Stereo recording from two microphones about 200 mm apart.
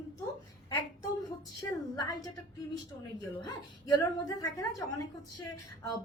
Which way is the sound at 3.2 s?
20° left (ahead or behind).